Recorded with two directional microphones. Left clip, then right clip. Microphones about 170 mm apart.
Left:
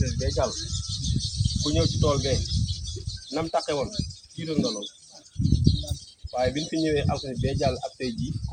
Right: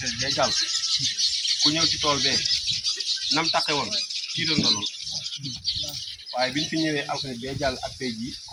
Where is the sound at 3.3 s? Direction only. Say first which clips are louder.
Right 2 dB; 75° left (ahead or behind).